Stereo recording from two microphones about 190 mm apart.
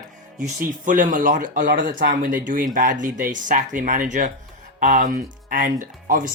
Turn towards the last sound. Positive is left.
turn(degrees=-45)  # may be behind; listen again after turning